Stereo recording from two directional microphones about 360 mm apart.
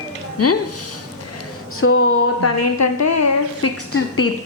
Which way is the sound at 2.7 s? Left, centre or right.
Left.